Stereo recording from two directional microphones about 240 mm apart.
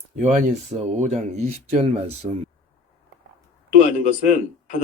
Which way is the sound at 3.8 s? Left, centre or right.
Left.